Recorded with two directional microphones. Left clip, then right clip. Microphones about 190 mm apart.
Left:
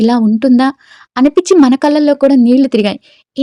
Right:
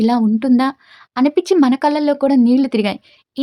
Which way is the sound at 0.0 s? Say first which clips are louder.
Left 5 dB; 25° left (ahead or behind).